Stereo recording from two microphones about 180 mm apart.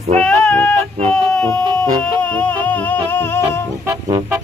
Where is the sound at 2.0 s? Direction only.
5° left (ahead or behind).